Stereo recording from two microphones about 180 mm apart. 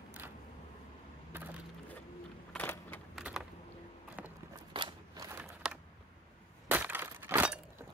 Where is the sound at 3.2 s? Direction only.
5° right (ahead or behind).